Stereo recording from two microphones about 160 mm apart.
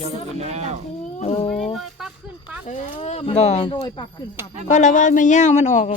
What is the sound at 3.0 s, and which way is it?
Speech, 40° left (ahead or behind).